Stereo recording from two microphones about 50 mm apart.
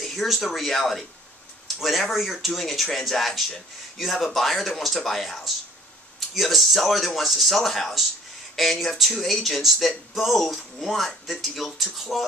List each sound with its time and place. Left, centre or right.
0.0 s speech: centre